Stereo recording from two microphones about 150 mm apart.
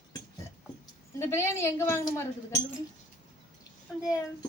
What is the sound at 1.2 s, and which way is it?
Speech, 15° left (ahead or behind).